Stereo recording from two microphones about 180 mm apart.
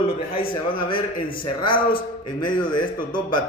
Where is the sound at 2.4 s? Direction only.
25° left (ahead or behind).